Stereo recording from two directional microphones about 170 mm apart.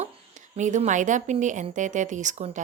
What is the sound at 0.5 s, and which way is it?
A woman's voice, 45° right (ahead or behind).